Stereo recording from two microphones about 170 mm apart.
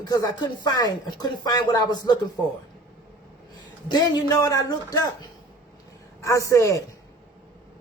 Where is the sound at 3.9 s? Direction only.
25° left (ahead or behind).